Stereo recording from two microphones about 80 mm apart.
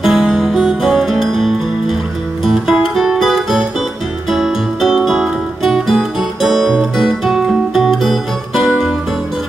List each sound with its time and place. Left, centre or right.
0.0 s music: centre